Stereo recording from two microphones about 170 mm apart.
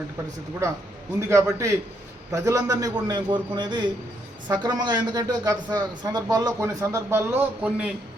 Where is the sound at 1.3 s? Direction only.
15° right (ahead or behind).